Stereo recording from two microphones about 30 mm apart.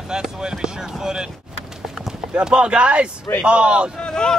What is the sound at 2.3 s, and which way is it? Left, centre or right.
Speech, right.